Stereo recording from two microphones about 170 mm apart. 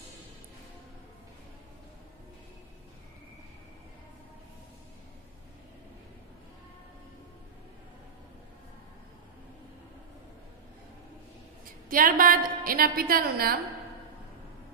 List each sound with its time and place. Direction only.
11.9 s a woman's voice: 55° right (ahead or behind)